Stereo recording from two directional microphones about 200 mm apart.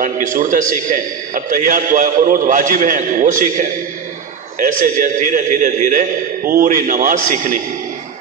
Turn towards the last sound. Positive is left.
turn(degrees=-40)  # may be behind; listen again after turning